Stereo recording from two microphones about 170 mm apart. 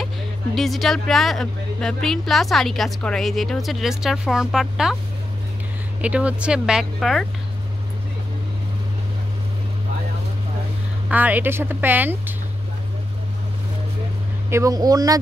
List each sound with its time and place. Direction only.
0.6 s speech: centre (ahead or behind)
5.9 s speech: 10° right (ahead or behind)
11.1 s speech: 10° right (ahead or behind)
14.5 s speech: 20° right (ahead or behind)